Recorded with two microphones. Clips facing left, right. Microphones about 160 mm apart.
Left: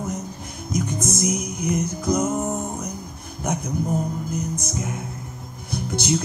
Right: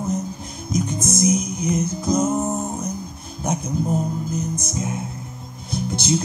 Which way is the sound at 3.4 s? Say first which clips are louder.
Right 2 dB; 25° right (ahead or behind).